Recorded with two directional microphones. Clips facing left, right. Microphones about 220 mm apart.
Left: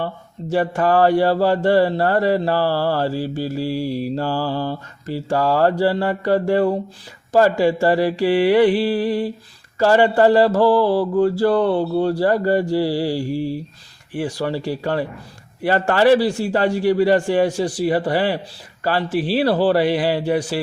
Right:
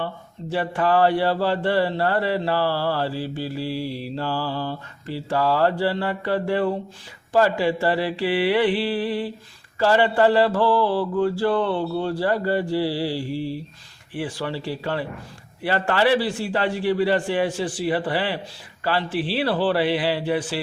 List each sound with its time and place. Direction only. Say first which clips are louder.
0.5 s mantra: left 4 dB; 45° left (ahead or behind)